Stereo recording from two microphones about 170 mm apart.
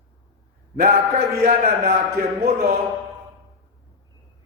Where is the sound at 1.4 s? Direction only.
50° right (ahead or behind).